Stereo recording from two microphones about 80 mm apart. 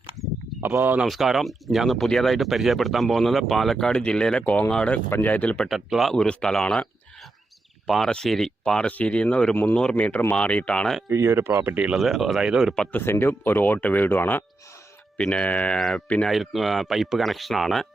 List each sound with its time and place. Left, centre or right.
0.6 s speech: right
1.0 s speech: centre
5.0 s speech: left
5.6 s speech: centre
7.9 s speech: centre
11.1 s speech: right
11.9 s speech: centre
12.9 s speech: left
16.2 s speech: centre